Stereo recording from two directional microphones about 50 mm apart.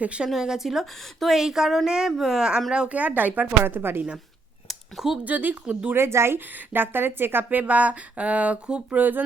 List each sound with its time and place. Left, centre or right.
0.0 s speech: right
0.3 s speech: centre
2.1 s a woman's voice: centre
2.4 s speech: centre; by 3.4 s right
3.6 s a woman's voice: right
4.7 s a sound: centre
5.2 s a woman's voice: right
5.9 s a woman's voice: right
9.0 s a woman's voice: right